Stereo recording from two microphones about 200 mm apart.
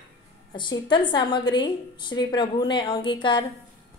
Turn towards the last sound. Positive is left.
turn(degrees=25)  # may be behind; listen again after turning